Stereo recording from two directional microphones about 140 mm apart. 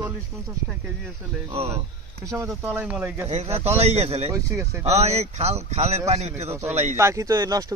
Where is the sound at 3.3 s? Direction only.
50° right (ahead or behind).